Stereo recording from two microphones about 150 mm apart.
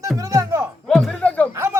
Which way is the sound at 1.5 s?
20° right (ahead or behind).